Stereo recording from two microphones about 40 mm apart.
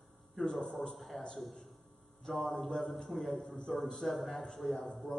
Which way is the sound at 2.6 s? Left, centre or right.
Centre.